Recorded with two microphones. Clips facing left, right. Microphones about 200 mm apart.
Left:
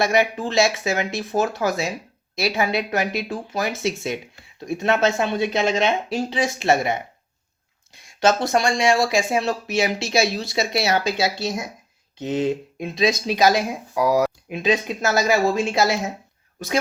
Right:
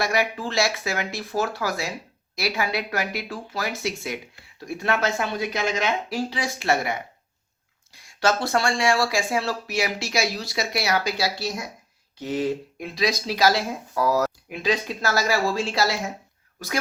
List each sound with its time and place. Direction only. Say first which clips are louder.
0.0 s speech: left 5 dB; 20° left (ahead or behind)